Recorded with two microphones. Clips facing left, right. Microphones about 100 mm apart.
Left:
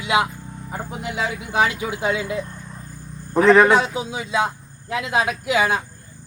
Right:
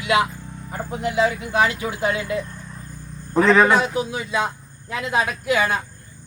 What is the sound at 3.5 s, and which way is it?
Speech, 15° left (ahead or behind).